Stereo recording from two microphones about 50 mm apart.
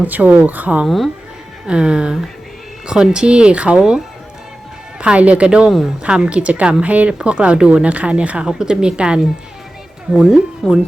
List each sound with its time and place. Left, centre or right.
0.0 s speech: right
0.9 s speech: centre
1.6 s speech: centre
3.8 s a woman's voice: centre
4.9 s speech: right
8.4 s a woman's voice: centre
10.6 s speech: centre